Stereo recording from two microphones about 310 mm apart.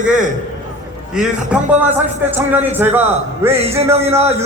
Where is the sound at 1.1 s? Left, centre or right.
Centre.